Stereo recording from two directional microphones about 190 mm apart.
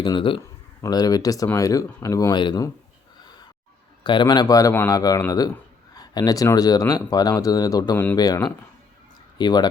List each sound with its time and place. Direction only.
0.0 s speech: 25° left (ahead or behind)
4.0 s speech: 25° left (ahead or behind)